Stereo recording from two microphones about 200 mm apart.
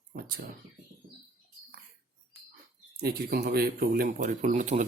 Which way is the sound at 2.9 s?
50° right (ahead or behind).